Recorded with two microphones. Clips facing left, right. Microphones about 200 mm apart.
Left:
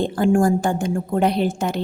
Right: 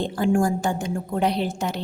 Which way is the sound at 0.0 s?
50° left (ahead or behind).